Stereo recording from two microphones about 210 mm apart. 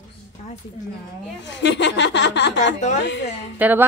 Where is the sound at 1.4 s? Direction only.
55° left (ahead or behind).